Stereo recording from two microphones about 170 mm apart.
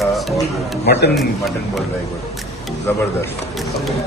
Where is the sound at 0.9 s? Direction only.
75° left (ahead or behind).